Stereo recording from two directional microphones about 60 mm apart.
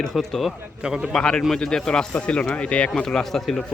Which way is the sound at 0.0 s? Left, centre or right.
Centre.